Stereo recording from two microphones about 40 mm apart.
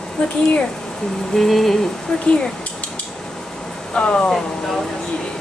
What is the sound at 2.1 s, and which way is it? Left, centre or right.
Speech, left.